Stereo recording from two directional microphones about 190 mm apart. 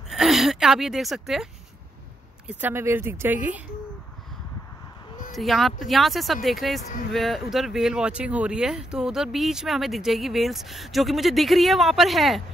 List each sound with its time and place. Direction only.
0.1 s a woman's voice: centre (ahead or behind)
5.3 s speech: centre (ahead or behind)